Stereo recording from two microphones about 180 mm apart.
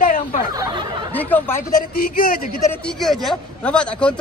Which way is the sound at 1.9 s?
55° left (ahead or behind).